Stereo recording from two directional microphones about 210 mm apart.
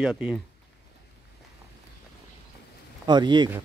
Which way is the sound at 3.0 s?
20° right (ahead or behind).